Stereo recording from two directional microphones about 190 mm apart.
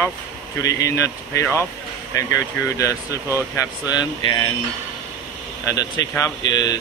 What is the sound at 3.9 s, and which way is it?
Speech, 20° left (ahead or behind).